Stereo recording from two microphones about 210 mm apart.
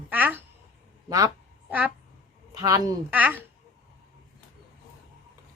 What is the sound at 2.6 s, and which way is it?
Speech, 15° right (ahead or behind).